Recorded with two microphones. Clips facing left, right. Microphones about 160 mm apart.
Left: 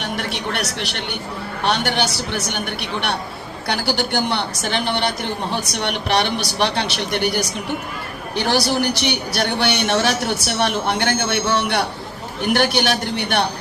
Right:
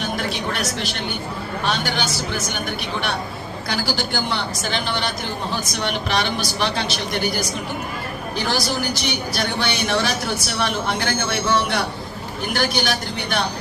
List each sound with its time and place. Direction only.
0.0 s a woman's voice: 65° left (ahead or behind)
8.4 s a woman's voice: 65° left (ahead or behind)